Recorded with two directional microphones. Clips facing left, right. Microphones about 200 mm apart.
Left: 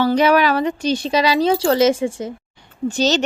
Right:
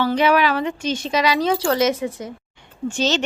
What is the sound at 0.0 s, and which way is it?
Speech, 40° left (ahead or behind).